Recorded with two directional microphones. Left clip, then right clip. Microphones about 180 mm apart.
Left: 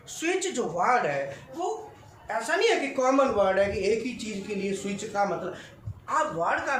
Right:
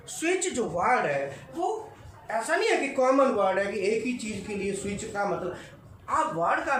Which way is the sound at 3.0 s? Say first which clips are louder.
Right 1 dB; 25° left (ahead or behind).